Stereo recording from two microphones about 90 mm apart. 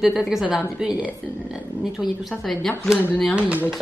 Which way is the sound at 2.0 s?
5° left (ahead or behind).